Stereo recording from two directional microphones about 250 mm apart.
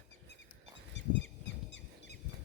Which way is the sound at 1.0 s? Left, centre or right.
Left.